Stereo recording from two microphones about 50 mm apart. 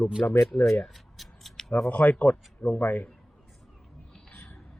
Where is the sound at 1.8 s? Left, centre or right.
Left.